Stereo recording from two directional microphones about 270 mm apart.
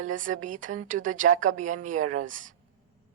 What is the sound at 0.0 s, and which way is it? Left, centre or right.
A woman's voice, right.